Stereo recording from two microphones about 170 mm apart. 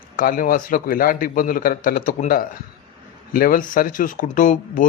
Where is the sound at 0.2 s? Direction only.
55° left (ahead or behind).